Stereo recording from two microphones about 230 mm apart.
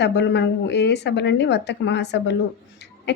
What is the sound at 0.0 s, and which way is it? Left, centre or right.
A woman's voice, left.